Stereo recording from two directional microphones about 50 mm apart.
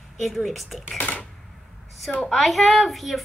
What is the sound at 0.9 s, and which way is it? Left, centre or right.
Typewriter, left.